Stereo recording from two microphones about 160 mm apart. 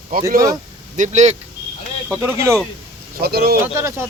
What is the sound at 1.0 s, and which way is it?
Speech, 45° right (ahead or behind).